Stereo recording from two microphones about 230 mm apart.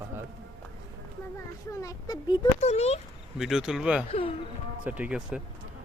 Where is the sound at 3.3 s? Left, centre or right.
Centre.